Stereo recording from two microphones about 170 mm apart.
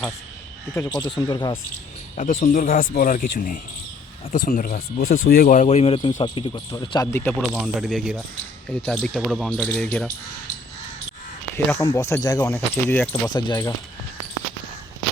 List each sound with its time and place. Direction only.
0.7 s speech: 20° left (ahead or behind)
2.1 s speech: 50° left (ahead or behind); by 7.3 s 15° left (ahead or behind)
7.5 s speech: 5° right (ahead or behind)
11.5 s speech: 20° left (ahead or behind)
13.2 s speech: 25° left (ahead or behind)